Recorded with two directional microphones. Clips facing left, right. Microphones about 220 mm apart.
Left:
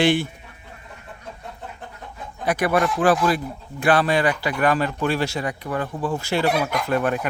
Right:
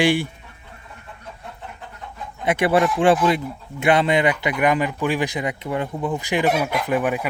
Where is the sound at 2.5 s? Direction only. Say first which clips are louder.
Right 2 dB; 25° right (ahead or behind).